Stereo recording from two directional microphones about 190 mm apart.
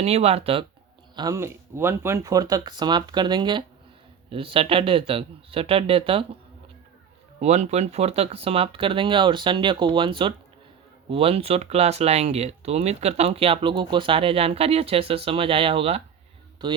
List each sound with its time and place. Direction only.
0.0 s speech: 35° right (ahead or behind)
1.1 s speech: 20° right (ahead or behind)
7.4 s speech: 35° right (ahead or behind)